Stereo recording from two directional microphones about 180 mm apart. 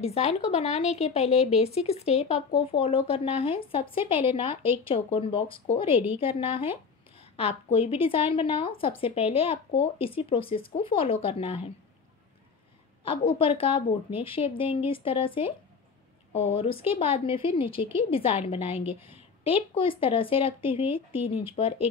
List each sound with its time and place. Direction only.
0.0 s a woman's voice: 35° left (ahead or behind)
13.0 s speech: 30° left (ahead or behind)
19.0 s a sound: 30° left (ahead or behind)
19.8 s speech: 30° left (ahead or behind)